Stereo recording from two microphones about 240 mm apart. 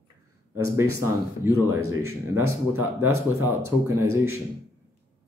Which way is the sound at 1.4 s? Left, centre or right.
Centre.